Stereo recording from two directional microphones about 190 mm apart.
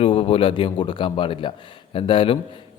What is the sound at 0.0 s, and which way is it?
A man's voice, 30° left (ahead or behind).